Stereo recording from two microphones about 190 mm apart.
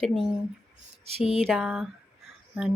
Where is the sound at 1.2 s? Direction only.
30° left (ahead or behind).